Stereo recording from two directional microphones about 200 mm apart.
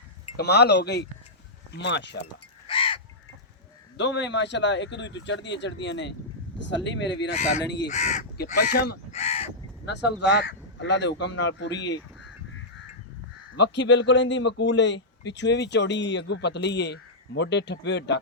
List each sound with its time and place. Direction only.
0.3 s a man's voice: 55° left (ahead or behind)
2.6 s crow: 25° left (ahead or behind)
3.9 s a man's voice: 65° left (ahead or behind)
7.3 s speech: 35° left (ahead or behind)
7.6 s a man's voice: 60° left (ahead or behind)
7.9 s speech: 35° left (ahead or behind)
8.5 s speech: 50° left (ahead or behind)
9.1 s crow: 30° left (ahead or behind)
9.8 s a man's voice: 60° left (ahead or behind)
13.6 s a man's voice: 60° left (ahead or behind)